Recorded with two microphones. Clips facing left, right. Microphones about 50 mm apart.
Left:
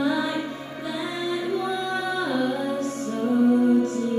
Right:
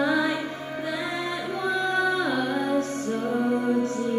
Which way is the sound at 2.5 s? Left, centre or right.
Right.